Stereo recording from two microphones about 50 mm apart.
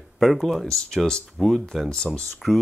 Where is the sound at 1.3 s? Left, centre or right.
Centre.